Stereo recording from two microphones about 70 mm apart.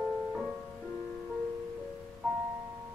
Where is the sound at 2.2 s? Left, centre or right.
Centre.